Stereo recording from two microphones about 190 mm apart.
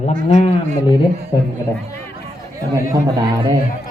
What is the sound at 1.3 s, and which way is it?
Speech, 25° left (ahead or behind).